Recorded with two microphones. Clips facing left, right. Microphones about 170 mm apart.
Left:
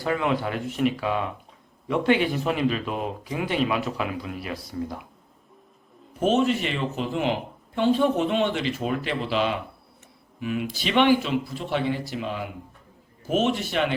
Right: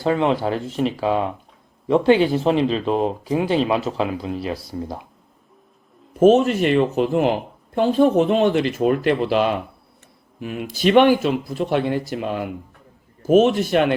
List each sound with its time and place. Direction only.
0.0 s speech: 30° right (ahead or behind)
6.1 s speech: 45° right (ahead or behind)